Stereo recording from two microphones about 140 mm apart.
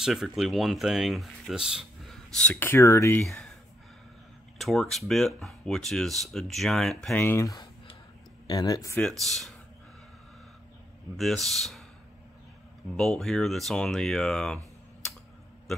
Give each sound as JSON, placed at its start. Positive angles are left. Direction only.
{"t": 0.0, "sound": "speech", "side_deg": -5}
{"t": 2.3, "sound": "speech", "side_deg": 10}
{"t": 3.2, "sound": "speech", "side_deg": 5}
{"t": 4.6, "sound": "speech", "side_deg": 0}
{"t": 7.2, "sound": "speech", "side_deg": 20}
{"t": 9.0, "sound": "speech", "side_deg": 0}
{"t": 11.1, "sound": "speech", "side_deg": 0}
{"t": 12.9, "sound": "speech", "side_deg": 0}